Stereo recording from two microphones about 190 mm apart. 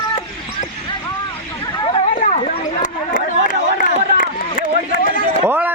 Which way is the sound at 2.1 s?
35° left (ahead or behind).